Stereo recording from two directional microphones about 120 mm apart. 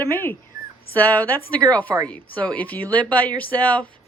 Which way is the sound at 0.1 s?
15° left (ahead or behind).